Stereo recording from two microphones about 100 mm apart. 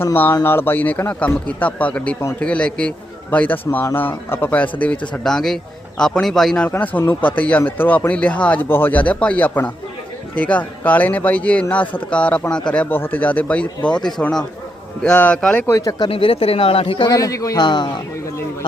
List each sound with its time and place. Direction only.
0.0 s a man's voice: 20° left (ahead or behind); by 6.7 s 5° left (ahead or behind)
6.7 s a man's voice: 15° left (ahead or behind)
15.6 s speech: 30° left (ahead or behind)
16.0 s speech: 65° left (ahead or behind)
17.1 s a man's voice: 35° left (ahead or behind)